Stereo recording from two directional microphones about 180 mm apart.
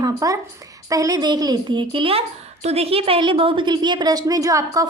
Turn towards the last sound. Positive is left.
turn(degrees=-20)  # may be behind; listen again after turning